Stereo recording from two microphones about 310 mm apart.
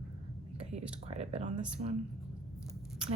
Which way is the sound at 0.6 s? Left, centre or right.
Right.